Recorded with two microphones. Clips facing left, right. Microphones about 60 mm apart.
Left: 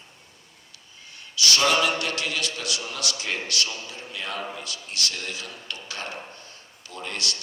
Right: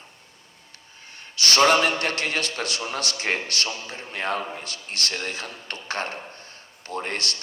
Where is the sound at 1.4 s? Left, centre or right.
Right.